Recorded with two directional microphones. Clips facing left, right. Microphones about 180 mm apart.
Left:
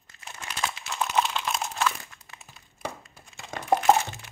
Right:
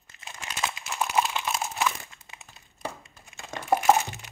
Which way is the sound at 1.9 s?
20° right (ahead or behind).